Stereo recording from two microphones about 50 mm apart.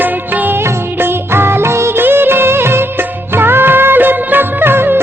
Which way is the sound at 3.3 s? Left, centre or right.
Right.